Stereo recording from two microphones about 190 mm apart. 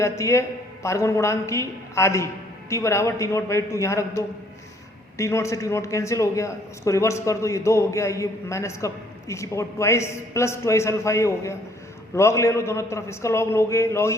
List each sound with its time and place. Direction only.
0.0 s a man's voice: 15° left (ahead or behind)